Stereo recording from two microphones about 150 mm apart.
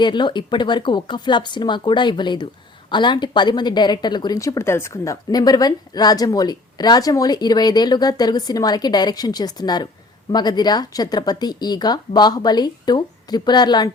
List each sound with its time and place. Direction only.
0.0 s a woman's voice: 30° left (ahead or behind)